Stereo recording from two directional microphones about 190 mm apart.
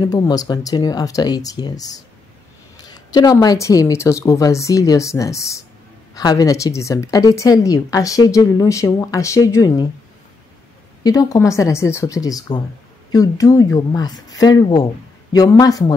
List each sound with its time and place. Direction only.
0.0 s a woman's voice: 20° left (ahead or behind)
11.1 s a woman's voice: 15° left (ahead or behind)